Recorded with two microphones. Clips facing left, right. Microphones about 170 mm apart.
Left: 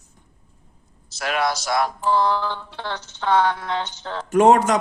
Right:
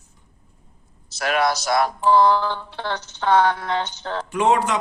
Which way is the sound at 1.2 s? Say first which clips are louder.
Right 2 dB; 50° right (ahead or behind).